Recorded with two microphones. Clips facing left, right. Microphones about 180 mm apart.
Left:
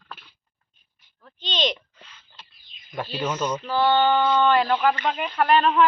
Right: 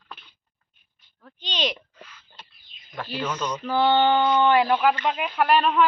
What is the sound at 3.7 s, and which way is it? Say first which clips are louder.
Speech: right 1 dB; 15° right (ahead or behind).